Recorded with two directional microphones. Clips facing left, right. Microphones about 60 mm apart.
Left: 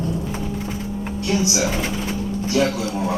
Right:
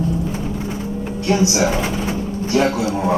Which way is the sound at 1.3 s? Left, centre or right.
Right.